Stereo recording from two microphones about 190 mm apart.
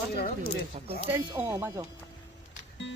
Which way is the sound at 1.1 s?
15° right (ahead or behind).